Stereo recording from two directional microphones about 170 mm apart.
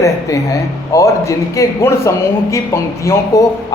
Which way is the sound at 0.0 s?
20° left (ahead or behind).